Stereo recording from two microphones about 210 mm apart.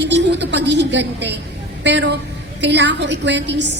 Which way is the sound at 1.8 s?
55° right (ahead or behind).